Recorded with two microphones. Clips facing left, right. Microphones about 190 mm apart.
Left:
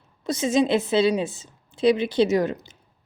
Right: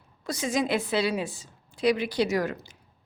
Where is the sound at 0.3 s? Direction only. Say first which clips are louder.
Left 6 dB; 25° left (ahead or behind).